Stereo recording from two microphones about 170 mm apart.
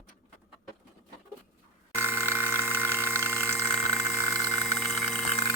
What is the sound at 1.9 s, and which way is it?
Pump, 15° left (ahead or behind).